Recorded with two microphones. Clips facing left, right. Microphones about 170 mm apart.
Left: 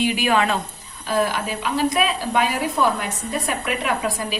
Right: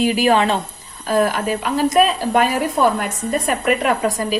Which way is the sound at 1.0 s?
45° right (ahead or behind).